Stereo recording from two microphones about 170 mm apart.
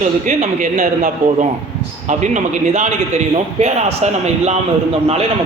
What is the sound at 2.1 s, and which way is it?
A man's voice, 45° right (ahead or behind).